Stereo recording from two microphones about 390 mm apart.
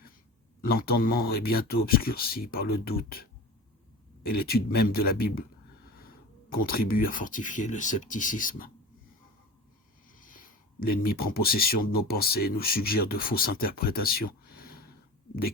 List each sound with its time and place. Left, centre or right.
0.6 s speech: left
10.2 s speech: left